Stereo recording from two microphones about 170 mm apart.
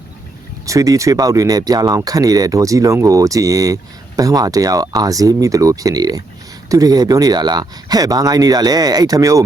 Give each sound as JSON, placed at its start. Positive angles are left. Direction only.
{"t": 0.6, "sound": "speech", "side_deg": -20}